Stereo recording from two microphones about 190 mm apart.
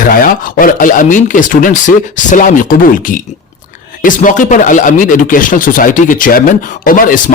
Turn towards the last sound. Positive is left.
turn(degrees=45)  # may be behind; listen again after turning